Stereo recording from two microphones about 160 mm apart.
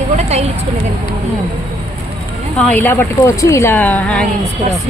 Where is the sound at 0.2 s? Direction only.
45° right (ahead or behind).